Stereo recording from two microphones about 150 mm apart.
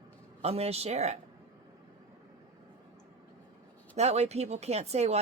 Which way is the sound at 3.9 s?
45° right (ahead or behind).